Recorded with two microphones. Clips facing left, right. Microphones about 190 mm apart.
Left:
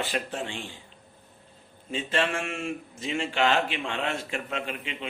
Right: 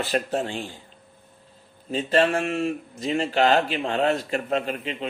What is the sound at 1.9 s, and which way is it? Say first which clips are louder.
A man's voice: right 7 dB; 40° right (ahead or behind).